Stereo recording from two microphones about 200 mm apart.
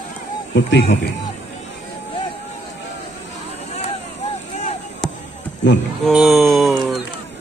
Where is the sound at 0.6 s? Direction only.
60° left (ahead or behind).